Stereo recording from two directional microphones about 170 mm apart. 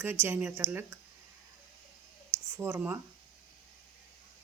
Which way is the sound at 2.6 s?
10° right (ahead or behind).